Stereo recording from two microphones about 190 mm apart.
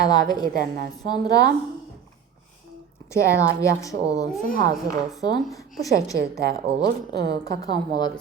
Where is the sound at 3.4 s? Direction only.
15° left (ahead or behind).